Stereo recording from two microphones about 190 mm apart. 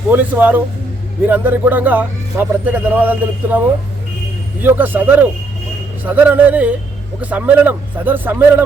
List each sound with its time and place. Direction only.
0.1 s a man's voice: 10° right (ahead or behind)
4.6 s a man's voice: 10° right (ahead or behind)